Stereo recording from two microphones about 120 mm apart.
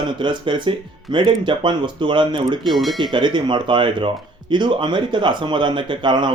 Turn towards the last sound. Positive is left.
turn(degrees=-40)  # may be behind; listen again after turning